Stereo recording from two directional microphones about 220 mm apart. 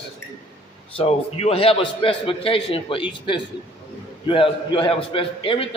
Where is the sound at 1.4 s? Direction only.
25° left (ahead or behind).